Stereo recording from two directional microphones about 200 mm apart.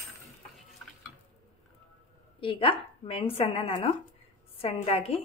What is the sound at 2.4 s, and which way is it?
A woman's voice, 25° left (ahead or behind).